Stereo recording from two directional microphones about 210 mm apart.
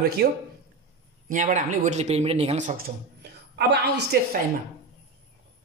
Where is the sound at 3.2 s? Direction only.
50° right (ahead or behind).